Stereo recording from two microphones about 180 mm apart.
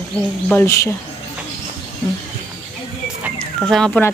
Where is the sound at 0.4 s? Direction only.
10° left (ahead or behind).